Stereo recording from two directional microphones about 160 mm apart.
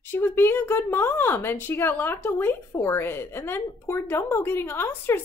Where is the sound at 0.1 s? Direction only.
15° left (ahead or behind).